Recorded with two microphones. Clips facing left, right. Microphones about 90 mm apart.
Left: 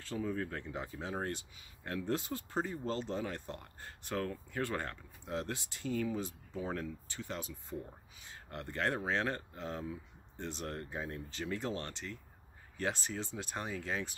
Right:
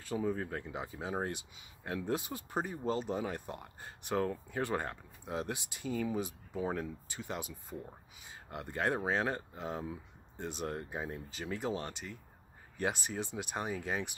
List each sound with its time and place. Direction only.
0.0 s speech: 15° right (ahead or behind)